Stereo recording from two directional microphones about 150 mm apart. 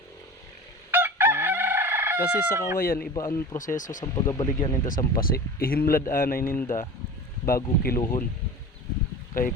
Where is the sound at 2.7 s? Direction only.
85° left.